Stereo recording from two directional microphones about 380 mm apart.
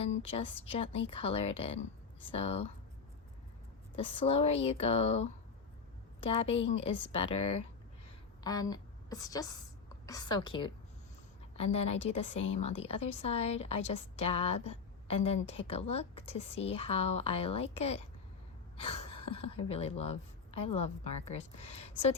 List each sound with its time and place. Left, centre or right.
0.0 s speech: centre
3.9 s a woman's voice: centre
18.8 s a sound: centre
19.4 s speech: centre